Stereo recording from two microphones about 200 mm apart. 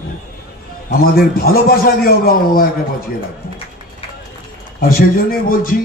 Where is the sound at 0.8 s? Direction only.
50° left (ahead or behind).